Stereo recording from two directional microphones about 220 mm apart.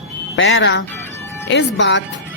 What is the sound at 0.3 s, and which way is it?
Speech, 60° left (ahead or behind).